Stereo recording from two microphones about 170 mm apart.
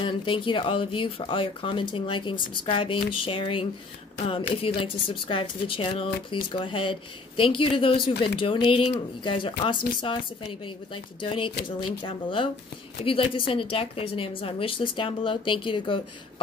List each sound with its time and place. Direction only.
0.0 s a woman's voice: 30° left (ahead or behind)
11.1 s a woman's voice: 30° left (ahead or behind)